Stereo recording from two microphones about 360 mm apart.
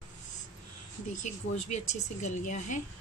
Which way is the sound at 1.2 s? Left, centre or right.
Centre.